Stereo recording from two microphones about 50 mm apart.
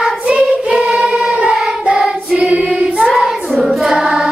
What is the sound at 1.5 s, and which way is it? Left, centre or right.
Singing, centre.